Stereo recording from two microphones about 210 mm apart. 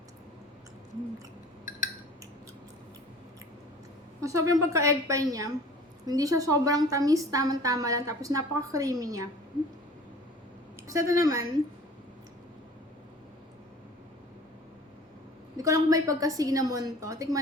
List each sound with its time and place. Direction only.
4.2 s a woman's voice: 15° right (ahead or behind)
10.8 s a sound: 15° right (ahead or behind)
11.2 s a woman's voice: 15° right (ahead or behind)
15.5 s a woman's voice: 15° right (ahead or behind)